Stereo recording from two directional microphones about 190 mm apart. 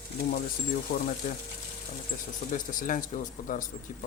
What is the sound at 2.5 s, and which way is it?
Speech, 45° left (ahead or behind).